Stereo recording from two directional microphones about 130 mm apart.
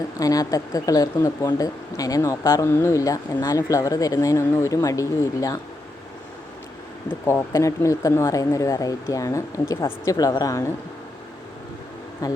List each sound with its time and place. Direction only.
0.2 s speech: 25° left (ahead or behind)
7.3 s speech: 20° left (ahead or behind)
12.2 s speech: 25° left (ahead or behind)